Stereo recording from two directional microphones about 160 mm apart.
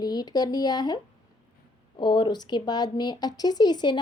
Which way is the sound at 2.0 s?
30° left (ahead or behind).